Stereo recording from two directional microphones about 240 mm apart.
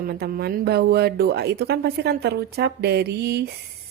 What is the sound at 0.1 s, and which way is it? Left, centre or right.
A woman's voice, right.